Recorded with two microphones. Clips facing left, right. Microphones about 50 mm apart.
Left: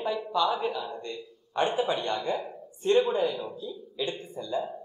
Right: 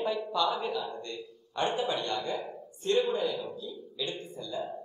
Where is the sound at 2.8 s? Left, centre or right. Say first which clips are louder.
Left 4 dB; left.